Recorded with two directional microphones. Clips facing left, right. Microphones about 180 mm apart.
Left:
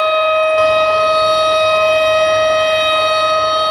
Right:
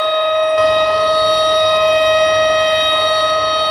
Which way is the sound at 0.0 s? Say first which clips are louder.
Left 1 dB; 20° right (ahead or behind).